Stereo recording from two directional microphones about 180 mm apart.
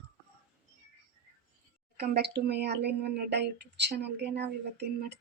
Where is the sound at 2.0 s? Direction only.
65° right (ahead or behind).